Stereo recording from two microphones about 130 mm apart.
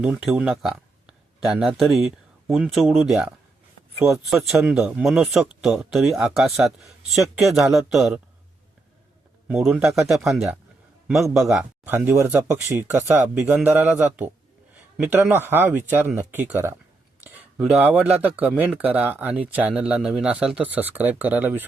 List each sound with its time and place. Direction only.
0.0 s speech: 5° right (ahead or behind)
9.5 s speech: 5° right (ahead or behind)
11.5 s speech: 15° right (ahead or behind)